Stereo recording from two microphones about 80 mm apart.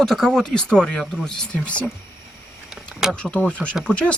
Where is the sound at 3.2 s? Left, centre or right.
Centre.